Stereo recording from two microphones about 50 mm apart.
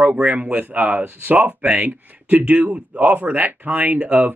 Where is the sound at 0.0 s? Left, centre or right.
Right.